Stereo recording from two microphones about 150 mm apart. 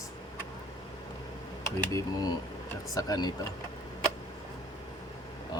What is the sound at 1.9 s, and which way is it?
Speech, 25° left (ahead or behind).